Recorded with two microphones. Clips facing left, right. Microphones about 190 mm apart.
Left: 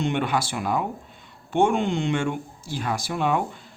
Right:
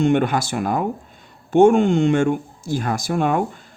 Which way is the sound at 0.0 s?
45° right (ahead or behind).